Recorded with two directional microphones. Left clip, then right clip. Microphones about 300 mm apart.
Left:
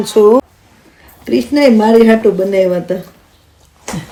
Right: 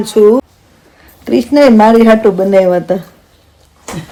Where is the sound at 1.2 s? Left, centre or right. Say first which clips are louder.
Right 3 dB; centre.